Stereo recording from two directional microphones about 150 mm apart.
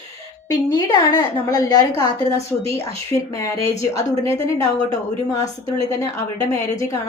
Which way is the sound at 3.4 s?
20° left (ahead or behind).